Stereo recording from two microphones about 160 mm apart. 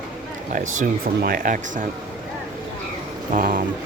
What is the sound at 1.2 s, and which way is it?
Speech, 60° right (ahead or behind).